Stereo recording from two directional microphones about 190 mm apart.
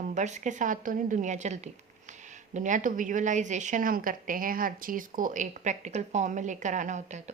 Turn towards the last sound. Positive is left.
turn(degrees=-40)  # may be behind; listen again after turning